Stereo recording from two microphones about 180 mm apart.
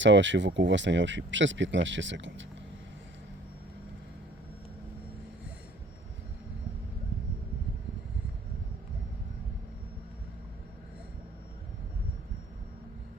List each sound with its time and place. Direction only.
0.0 s speech: 90° right